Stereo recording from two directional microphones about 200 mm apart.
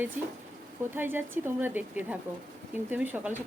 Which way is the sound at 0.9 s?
10° right (ahead or behind).